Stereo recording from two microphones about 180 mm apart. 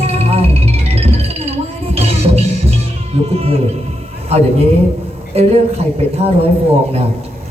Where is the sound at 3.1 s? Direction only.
35° right (ahead or behind).